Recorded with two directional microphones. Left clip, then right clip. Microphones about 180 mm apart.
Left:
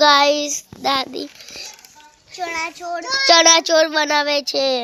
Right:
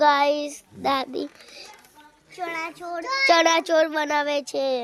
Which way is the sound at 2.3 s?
25° left (ahead or behind).